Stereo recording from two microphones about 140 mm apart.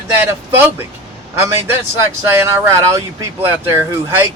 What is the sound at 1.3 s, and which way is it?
Speech, 20° right (ahead or behind).